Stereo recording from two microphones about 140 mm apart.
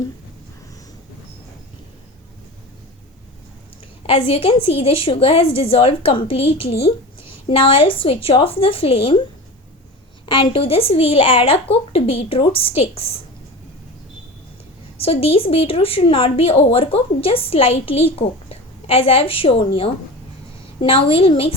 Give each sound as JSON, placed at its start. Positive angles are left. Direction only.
{"t": 4.0, "sound": "a woman's voice", "side_deg": 45}
{"t": 10.2, "sound": "a woman's voice", "side_deg": 35}
{"t": 14.9, "sound": "a woman's voice", "side_deg": 45}